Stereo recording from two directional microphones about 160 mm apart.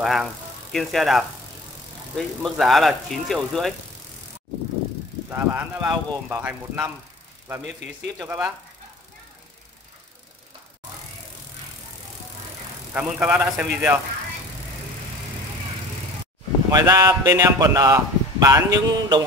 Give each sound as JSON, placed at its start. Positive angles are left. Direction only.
{"t": 0.0, "sound": "speech", "side_deg": 0}
{"t": 5.3, "sound": "speech", "side_deg": -10}
{"t": 8.2, "sound": "speech", "side_deg": -15}
{"t": 12.9, "sound": "speech", "side_deg": -10}
{"t": 16.7, "sound": "speech", "side_deg": -20}